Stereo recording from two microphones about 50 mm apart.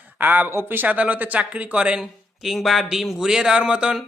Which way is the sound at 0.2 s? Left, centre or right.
Right.